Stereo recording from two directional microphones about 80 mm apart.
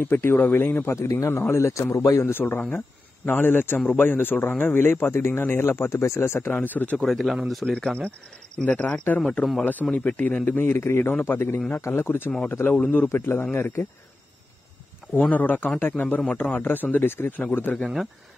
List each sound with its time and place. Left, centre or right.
0.1 s a man's voice: left
2.3 s a man's voice: left
7.1 s speech: centre
7.6 s a man's voice: centre; by 13.8 s left
15.1 s a man's voice: centre